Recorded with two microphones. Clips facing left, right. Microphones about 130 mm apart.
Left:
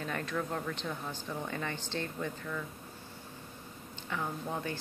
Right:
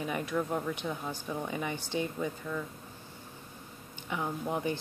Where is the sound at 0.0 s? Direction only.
10° right (ahead or behind).